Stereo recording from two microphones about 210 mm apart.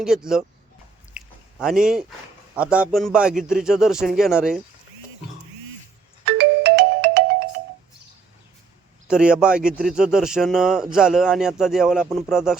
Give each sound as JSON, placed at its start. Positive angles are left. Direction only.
{"t": 0.0, "sound": "a man's voice", "side_deg": 0}
{"t": 1.1, "sound": "a sound", "side_deg": -5}
{"t": 2.6, "sound": "a man's voice", "side_deg": -5}
{"t": 6.2, "sound": "music", "side_deg": -50}
{"t": 9.0, "sound": "a man's voice", "side_deg": -5}